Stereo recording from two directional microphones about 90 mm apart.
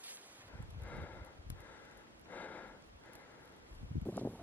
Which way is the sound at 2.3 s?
20° left (ahead or behind).